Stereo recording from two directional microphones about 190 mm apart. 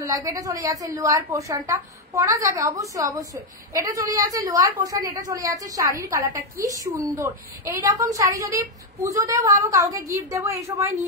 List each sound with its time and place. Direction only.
0.0 s a woman's voice: 15° right (ahead or behind)